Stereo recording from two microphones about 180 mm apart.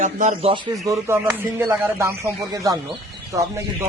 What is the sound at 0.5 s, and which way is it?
Speech, 25° right (ahead or behind).